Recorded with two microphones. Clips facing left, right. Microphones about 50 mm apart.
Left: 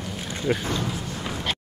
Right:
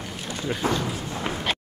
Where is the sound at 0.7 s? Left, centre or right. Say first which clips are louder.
Right 2 dB; right.